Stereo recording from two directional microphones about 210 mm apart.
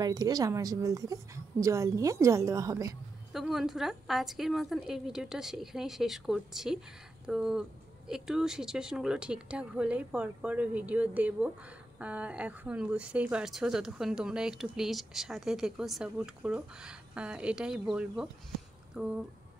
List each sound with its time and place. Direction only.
0.0 s a woman's voice: 20° right (ahead or behind)
3.3 s speech: centre (ahead or behind)